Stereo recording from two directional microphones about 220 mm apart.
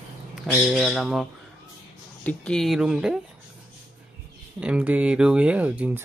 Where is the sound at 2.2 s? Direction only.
5° left (ahead or behind).